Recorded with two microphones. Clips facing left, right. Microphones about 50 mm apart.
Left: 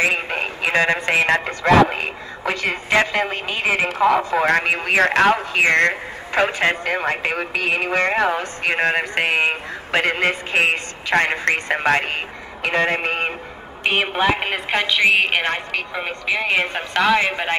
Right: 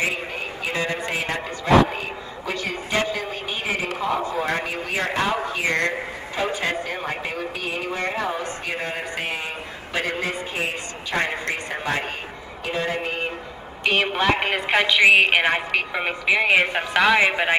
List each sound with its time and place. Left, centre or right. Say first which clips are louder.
0.1 s speech: left 6 dB; left
4.2 s speech: left 6 dB; left
13.8 s a woman's voice: left 2 dB; centre